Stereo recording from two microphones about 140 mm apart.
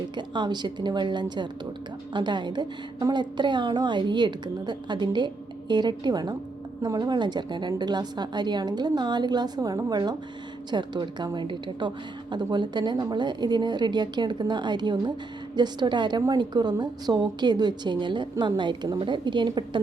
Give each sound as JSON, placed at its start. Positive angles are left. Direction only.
{"t": 0.2, "sound": "a woman's voice", "side_deg": -30}